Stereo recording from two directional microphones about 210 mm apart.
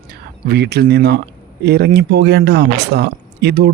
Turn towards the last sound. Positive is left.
turn(degrees=-50)  # may be behind; listen again after turning